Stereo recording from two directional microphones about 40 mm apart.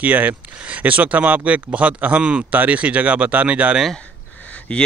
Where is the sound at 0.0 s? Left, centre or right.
Right.